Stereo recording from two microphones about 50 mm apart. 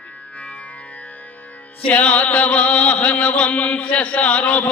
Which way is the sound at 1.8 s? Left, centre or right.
Left.